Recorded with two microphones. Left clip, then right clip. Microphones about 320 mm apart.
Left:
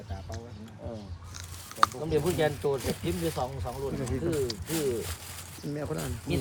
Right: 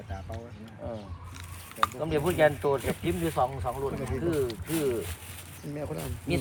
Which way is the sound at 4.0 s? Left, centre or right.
Left.